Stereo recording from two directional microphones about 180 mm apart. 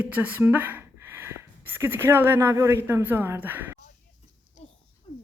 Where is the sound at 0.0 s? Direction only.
10° right (ahead or behind).